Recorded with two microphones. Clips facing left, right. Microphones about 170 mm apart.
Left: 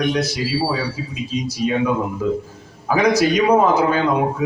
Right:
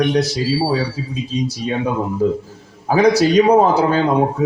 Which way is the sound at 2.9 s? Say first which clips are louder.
Right 3 dB; 35° right (ahead or behind).